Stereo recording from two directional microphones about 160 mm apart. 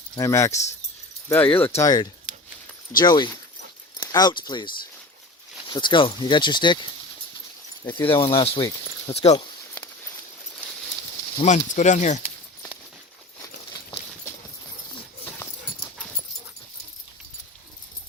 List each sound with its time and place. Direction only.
0.2 s speech: 20° left (ahead or behind)
7.9 s speech: 10° left (ahead or behind)
8.1 s speech: 35° left (ahead or behind)
11.4 s speech: 50° left (ahead or behind)
15.2 s dog: 15° left (ahead or behind)